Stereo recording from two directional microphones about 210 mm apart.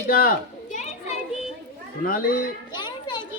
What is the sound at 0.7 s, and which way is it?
Children playing, 35° left (ahead or behind).